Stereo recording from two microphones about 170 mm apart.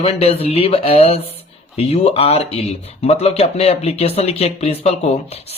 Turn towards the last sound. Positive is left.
turn(degrees=35)  # may be behind; listen again after turning